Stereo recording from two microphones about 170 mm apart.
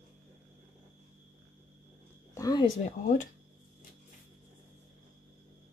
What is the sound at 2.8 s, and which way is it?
Speech, 50° left (ahead or behind).